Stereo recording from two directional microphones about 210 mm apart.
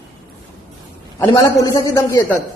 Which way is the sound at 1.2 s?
15° left (ahead or behind).